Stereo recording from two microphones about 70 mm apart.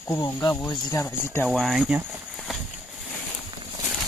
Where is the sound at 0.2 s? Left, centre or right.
Left.